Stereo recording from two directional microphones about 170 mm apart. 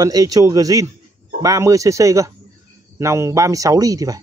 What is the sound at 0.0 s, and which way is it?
Speech, 20° right (ahead or behind).